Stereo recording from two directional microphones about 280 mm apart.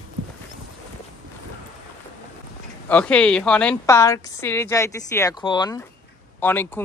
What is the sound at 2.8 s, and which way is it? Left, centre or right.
A woman's voice, centre.